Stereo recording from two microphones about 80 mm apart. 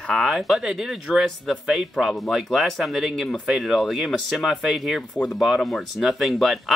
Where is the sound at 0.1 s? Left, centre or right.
Centre.